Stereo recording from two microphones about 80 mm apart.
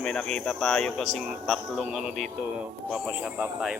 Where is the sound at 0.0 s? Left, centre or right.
Centre.